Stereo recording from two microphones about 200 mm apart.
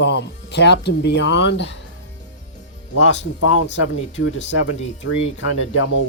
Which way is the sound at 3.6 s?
65° left (ahead or behind).